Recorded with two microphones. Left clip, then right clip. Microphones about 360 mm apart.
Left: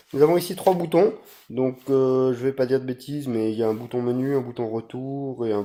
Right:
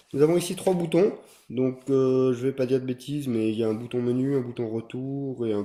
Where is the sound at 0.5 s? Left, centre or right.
Left.